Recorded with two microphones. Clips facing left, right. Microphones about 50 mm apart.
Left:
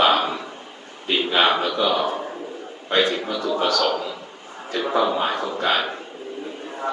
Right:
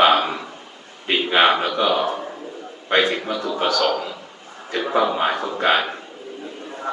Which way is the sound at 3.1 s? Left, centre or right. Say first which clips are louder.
Even; centre.